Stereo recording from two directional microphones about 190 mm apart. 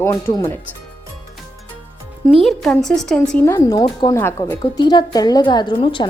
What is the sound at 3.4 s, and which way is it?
A woman's voice, 15° left (ahead or behind).